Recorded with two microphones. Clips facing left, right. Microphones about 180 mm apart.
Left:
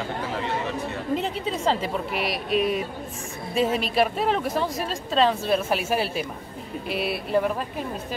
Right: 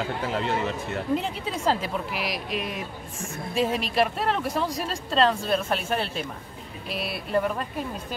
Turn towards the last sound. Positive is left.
turn(degrees=0)  # may be behind; listen again after turning